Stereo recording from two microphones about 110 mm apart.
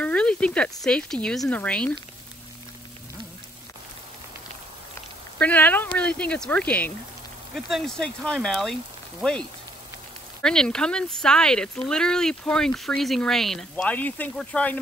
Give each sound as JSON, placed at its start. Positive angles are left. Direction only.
{"t": 0.0, "sound": "speech", "side_deg": 10}
{"t": 5.4, "sound": "speech", "side_deg": 15}
{"t": 7.5, "sound": "speech", "side_deg": 0}